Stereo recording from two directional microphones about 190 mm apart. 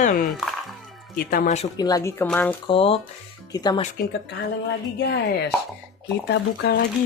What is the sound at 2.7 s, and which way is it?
Speech, 30° left (ahead or behind).